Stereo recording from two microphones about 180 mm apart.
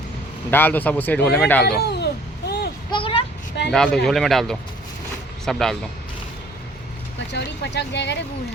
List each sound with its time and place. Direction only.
0.5 s speech: 10° left (ahead or behind)
1.6 s a child's voice: 65° left (ahead or behind)
2.9 s a sound: 30° left (ahead or behind)
3.7 s speech: 5° left (ahead or behind)
7.3 s speech: 70° left (ahead or behind)